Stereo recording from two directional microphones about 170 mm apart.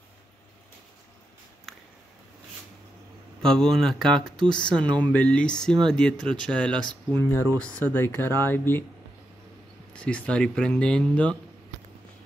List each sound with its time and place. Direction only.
1.7 s a sound: centre (ahead or behind)
3.4 s speech: 5° left (ahead or behind)
6.7 s speech: 25° right (ahead or behind)
7.2 s speech: 10° left (ahead or behind)
9.9 s speech: 5° left (ahead or behind)